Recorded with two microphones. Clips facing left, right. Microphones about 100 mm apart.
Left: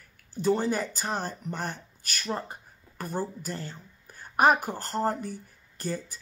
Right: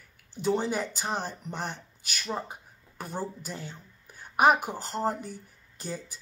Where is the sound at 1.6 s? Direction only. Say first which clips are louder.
Left 1 dB; 50° left (ahead or behind).